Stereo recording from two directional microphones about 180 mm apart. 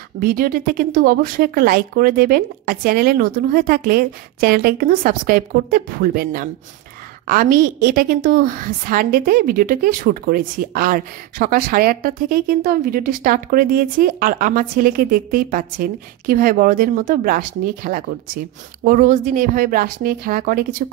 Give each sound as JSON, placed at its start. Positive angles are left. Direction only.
{"t": 0.2, "sound": "a woman's voice", "side_deg": -55}